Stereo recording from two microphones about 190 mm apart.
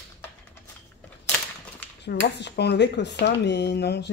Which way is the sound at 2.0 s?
60° left (ahead or behind).